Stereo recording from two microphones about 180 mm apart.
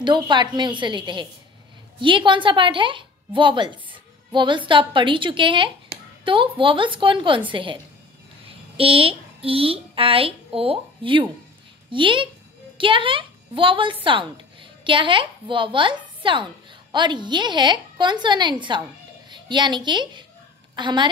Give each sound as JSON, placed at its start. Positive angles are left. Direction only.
{"t": 0.0, "sound": "a woman's voice", "side_deg": -25}